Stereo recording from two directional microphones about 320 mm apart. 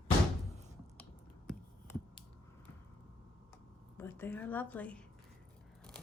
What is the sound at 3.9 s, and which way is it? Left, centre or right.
A woman's voice, centre.